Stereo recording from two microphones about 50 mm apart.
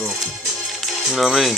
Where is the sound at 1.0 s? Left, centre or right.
Centre.